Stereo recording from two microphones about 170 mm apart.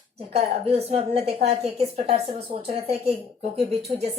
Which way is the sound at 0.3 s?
35° right (ahead or behind).